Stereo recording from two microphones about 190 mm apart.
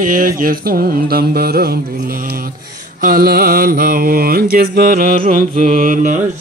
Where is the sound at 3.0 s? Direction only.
50° right (ahead or behind).